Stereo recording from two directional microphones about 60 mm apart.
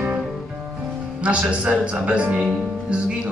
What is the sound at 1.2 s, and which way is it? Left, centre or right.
Speech, right.